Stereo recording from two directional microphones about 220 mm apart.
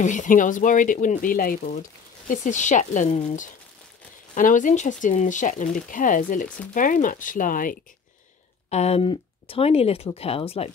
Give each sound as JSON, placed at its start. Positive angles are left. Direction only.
{"t": 0.0, "sound": "speech", "side_deg": 35}